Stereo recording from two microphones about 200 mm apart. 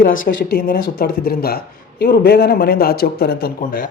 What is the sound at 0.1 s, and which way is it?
A man's voice, 65° left (ahead or behind).